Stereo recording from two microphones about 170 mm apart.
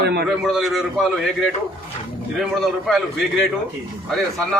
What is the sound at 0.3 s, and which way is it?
A man's voice, centre (ahead or behind).